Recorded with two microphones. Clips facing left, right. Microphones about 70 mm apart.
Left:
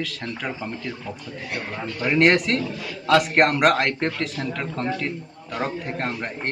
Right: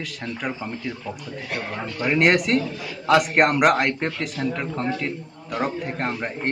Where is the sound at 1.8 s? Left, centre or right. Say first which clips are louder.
Left 1 dB; centre.